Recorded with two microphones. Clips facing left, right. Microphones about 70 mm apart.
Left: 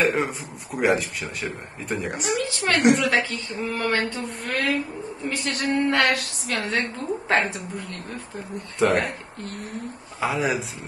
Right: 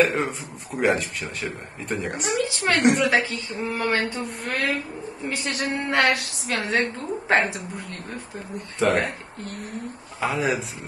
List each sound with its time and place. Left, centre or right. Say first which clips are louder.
0.0 s a woman's voice: right 1 dB; centre
5.9 s female singing: even; right
6.5 s a woman's voice: right 2 dB; centre
8.7 s a woman's voice: left 1 dB; centre
10.2 s a woman's voice: even; centre